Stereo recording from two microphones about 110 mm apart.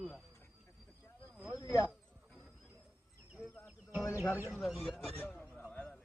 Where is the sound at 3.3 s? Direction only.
10° left (ahead or behind).